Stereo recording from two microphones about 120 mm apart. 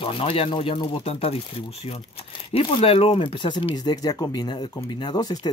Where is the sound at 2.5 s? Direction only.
50° left (ahead or behind).